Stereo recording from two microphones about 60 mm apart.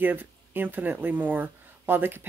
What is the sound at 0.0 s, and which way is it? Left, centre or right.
Speech, right.